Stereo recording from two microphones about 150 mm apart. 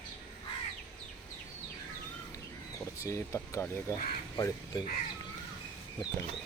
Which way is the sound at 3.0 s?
20° left (ahead or behind).